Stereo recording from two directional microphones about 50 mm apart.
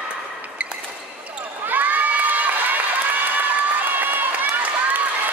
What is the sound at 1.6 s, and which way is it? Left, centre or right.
Crowd, right.